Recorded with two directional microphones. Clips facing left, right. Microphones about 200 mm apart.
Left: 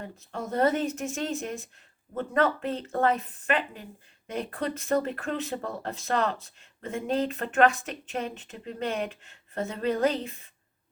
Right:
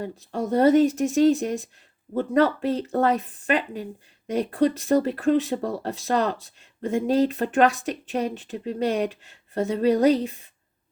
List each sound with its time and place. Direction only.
0.0 s speech: 35° right (ahead or behind)